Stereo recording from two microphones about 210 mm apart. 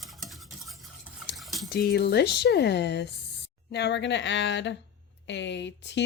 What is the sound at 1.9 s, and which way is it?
Speech, 50° left (ahead or behind).